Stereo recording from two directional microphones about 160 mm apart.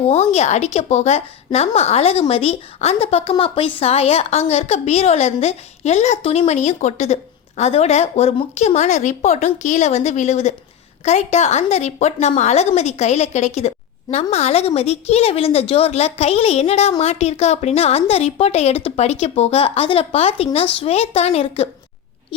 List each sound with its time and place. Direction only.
0.1 s a woman's voice: 45° left (ahead or behind)